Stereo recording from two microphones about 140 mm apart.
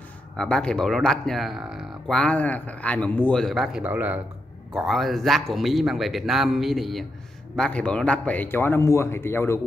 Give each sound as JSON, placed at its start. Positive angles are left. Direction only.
{"t": 0.4, "sound": "speech", "side_deg": 5}
{"t": 4.7, "sound": "speech", "side_deg": 0}